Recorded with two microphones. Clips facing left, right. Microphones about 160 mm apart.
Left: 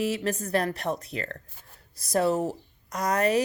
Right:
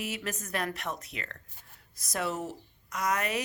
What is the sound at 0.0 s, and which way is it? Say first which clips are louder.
Speech: left 9 dB; 35° left (ahead or behind).